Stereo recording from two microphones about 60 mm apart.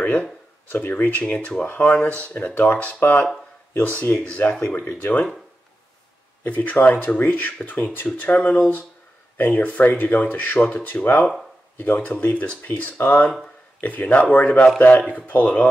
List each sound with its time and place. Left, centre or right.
0.0 s speech: left
6.4 s speech: left